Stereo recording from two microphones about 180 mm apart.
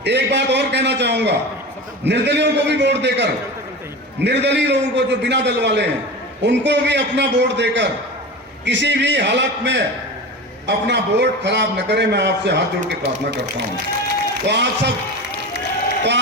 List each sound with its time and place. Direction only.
0.0 s a man's voice: 75° right (ahead or behind)
12.9 s speech: 65° right (ahead or behind)
14.4 s a man's voice: 75° right (ahead or behind)